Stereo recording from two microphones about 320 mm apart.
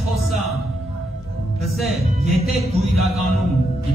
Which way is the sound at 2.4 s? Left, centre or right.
Centre.